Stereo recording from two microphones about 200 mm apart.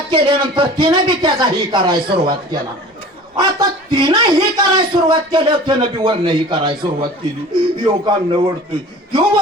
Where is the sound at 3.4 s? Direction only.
20° right (ahead or behind).